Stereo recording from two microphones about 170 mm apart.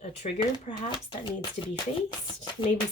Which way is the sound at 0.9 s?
30° left (ahead or behind).